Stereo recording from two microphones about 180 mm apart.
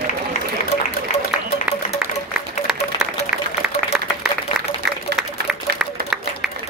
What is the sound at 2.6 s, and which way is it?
Applause, 5° right (ahead or behind).